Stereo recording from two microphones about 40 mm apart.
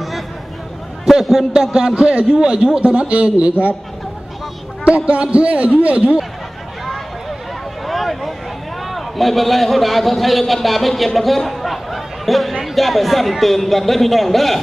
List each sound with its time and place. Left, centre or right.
1.0 s a man's voice: centre; by 3.5 s right
4.8 s a man's voice: right
7.8 s a sound: centre
8.9 s a man's voice: centre